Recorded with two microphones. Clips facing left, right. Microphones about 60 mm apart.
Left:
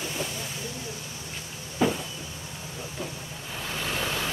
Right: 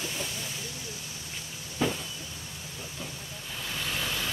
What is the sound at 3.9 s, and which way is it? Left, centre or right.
Vehicle, left.